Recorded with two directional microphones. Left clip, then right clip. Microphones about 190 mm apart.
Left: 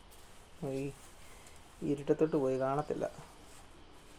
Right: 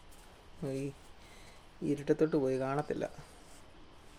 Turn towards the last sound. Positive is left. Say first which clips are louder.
# left 1 dB
turn(degrees=-10)  # may be behind; listen again after turning